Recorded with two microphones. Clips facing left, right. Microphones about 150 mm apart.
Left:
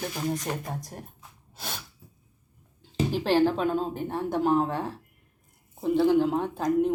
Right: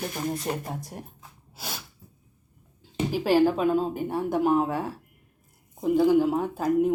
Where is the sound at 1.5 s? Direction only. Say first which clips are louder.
Even; 5° right (ahead or behind).